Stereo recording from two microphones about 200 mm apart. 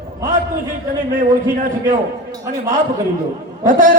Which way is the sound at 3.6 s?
40° right (ahead or behind).